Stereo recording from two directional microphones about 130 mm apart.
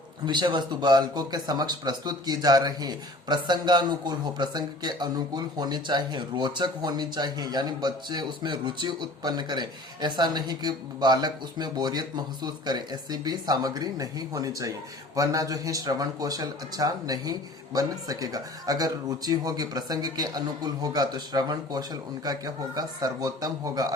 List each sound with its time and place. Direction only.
0.3 s speech: 35° right (ahead or behind)